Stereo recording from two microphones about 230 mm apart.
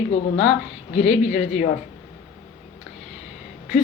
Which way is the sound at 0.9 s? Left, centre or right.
Left.